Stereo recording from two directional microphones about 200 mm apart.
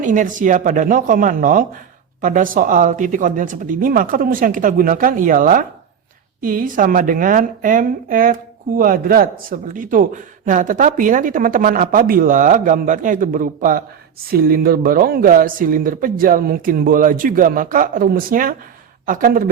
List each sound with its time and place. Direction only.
0.0 s a woman's voice: 40° right (ahead or behind)